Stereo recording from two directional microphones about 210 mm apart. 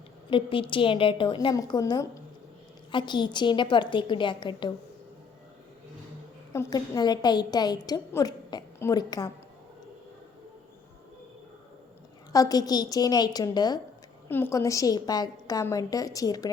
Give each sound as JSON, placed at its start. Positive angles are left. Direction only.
{"t": 0.3, "sound": "a woman's voice", "side_deg": 25}
{"t": 6.5, "sound": "a woman's voice", "side_deg": 15}
{"t": 12.3, "sound": "a woman's voice", "side_deg": 15}